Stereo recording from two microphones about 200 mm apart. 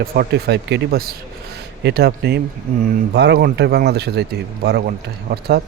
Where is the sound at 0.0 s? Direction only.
50° right (ahead or behind).